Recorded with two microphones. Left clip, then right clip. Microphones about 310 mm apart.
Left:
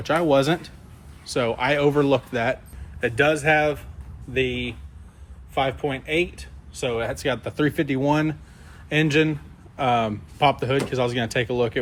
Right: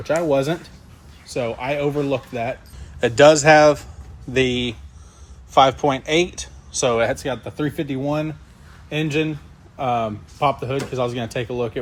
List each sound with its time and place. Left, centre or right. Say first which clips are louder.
0.0 s speech: even; centre
3.0 s speech: right 8 dB; centre
7.2 s speech: left 2 dB; centre